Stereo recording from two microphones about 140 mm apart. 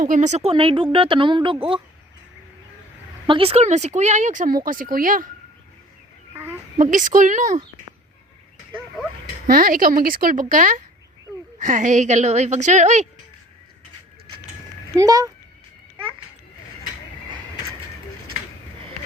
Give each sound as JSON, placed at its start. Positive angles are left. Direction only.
{"t": 0.0, "sound": "speech", "side_deg": -65}
{"t": 3.2, "sound": "speech", "side_deg": -40}
{"t": 6.3, "sound": "a sound", "side_deg": -15}
{"t": 6.7, "sound": "speech", "side_deg": -65}
{"t": 9.2, "sound": "speech", "side_deg": -85}
{"t": 10.5, "sound": "speech", "side_deg": -70}
{"t": 14.9, "sound": "speech", "side_deg": -25}